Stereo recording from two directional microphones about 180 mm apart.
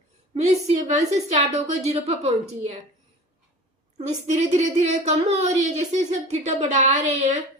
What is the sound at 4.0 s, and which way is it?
A woman's voice, 40° right (ahead or behind).